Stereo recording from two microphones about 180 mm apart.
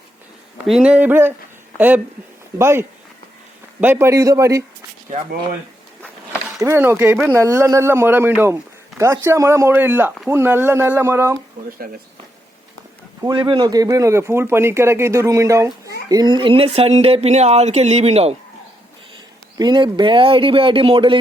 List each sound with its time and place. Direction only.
0.7 s speech: 5° right (ahead or behind)
2.6 s speech: 15° right (ahead or behind)
6.6 s speech: 15° right (ahead or behind)
13.2 s speech: 25° right (ahead or behind)
19.5 s speech: 25° right (ahead or behind)